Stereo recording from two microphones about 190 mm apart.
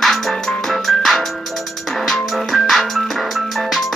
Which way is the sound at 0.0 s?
Centre (ahead or behind).